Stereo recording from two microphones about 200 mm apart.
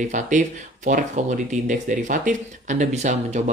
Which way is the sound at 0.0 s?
40° right (ahead or behind).